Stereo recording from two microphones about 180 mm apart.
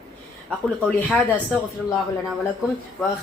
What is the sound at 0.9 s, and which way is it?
Speech, 5° left (ahead or behind).